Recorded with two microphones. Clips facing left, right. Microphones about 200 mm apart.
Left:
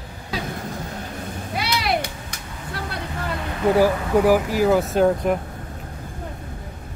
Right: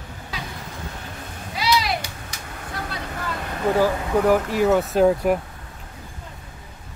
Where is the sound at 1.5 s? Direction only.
60° left (ahead or behind).